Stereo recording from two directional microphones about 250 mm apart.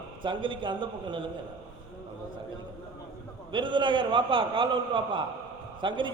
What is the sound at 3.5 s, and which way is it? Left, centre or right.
A man's voice, centre.